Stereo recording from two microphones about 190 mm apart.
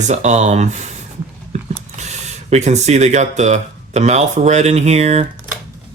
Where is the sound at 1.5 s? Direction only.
40° right (ahead or behind).